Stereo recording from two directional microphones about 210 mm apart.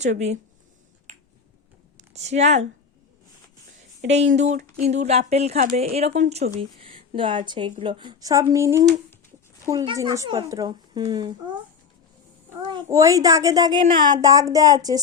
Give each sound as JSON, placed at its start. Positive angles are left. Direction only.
{"t": 1.1, "sound": "finger snapping", "side_deg": -35}
{"t": 2.0, "sound": "speech", "side_deg": -30}
{"t": 4.4, "sound": "speech", "side_deg": -35}
{"t": 6.6, "sound": "a sound", "side_deg": -25}
{"t": 7.2, "sound": "a woman's voice", "side_deg": -25}
{"t": 12.6, "sound": "a woman's voice", "side_deg": -20}